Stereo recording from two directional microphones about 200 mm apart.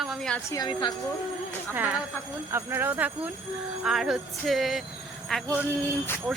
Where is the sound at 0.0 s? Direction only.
Centre (ahead or behind).